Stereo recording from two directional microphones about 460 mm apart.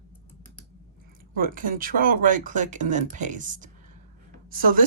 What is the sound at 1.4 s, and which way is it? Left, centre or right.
Speech, centre.